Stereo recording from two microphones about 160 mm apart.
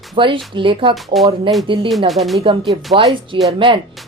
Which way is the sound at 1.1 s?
Centre (ahead or behind).